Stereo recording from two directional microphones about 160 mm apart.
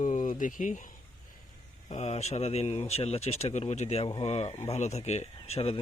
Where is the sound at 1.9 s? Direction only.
40° left (ahead or behind).